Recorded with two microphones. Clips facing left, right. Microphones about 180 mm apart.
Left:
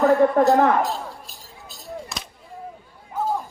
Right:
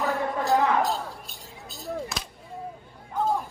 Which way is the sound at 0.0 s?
65° left (ahead or behind).